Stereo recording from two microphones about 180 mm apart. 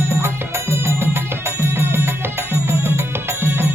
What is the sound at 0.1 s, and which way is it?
Music, 15° right (ahead or behind).